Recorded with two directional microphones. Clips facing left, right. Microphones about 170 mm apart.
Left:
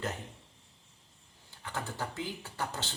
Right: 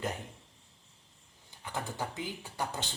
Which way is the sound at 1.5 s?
15° right (ahead or behind).